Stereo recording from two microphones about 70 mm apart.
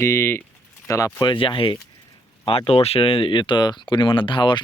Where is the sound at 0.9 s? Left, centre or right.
Left.